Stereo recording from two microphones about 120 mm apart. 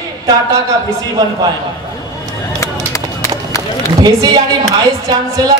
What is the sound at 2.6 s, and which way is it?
Run, 25° left (ahead or behind).